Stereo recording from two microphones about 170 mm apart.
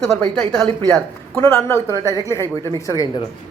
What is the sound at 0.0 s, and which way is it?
Speech, 5° left (ahead or behind).